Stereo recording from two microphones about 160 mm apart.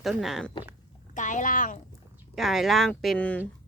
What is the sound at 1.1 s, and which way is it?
Speech, 50° left (ahead or behind).